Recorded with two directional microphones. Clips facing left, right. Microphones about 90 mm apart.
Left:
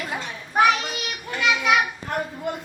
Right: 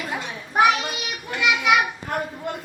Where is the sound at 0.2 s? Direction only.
5° right (ahead or behind).